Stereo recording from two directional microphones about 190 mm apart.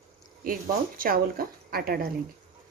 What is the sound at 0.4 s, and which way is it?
Speech, 50° right (ahead or behind).